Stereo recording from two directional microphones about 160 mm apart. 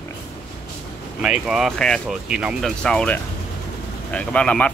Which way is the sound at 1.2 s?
5° right (ahead or behind).